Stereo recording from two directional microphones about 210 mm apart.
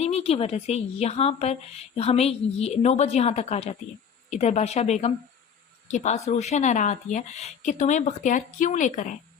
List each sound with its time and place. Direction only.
0.0 s a woman's voice: 30° left (ahead or behind)